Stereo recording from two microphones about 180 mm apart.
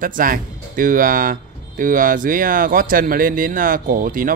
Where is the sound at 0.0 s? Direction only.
50° right (ahead or behind).